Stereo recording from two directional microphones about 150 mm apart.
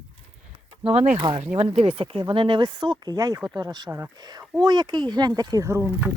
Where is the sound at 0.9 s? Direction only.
40° right (ahead or behind).